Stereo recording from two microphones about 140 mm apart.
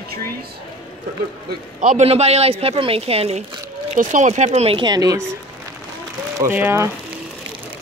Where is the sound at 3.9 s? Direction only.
60° right (ahead or behind).